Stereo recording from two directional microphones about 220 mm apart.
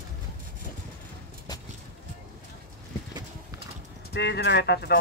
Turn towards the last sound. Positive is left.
turn(degrees=50)  # may be behind; listen again after turning